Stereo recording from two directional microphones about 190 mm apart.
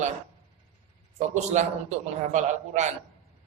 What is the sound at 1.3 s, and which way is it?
A man's voice, 40° right (ahead or behind).